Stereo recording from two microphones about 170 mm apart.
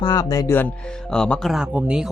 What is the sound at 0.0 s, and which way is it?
Speech, 25° left (ahead or behind).